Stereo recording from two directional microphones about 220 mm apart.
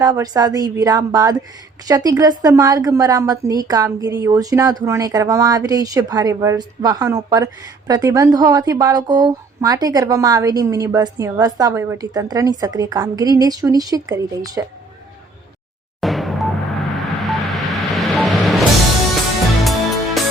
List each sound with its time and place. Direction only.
0.0 s speech: 15° right (ahead or behind)
16.0 s music: centre (ahead or behind)
17.2 s vehicle: centre (ahead or behind)
19.6 s music: centre (ahead or behind)